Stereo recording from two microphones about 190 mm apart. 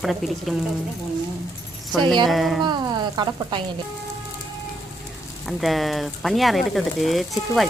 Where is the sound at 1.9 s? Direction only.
Centre (ahead or behind).